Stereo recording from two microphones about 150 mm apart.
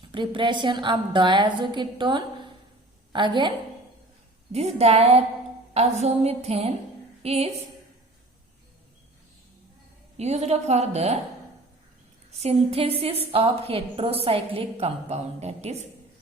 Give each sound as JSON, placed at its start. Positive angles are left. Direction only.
{"t": 0.0, "sound": "a woman's voice", "side_deg": -35}
{"t": 4.5, "sound": "a woman's voice", "side_deg": -45}
{"t": 10.2, "sound": "a woman's voice", "side_deg": -45}
{"t": 12.3, "sound": "a woman's voice", "side_deg": -45}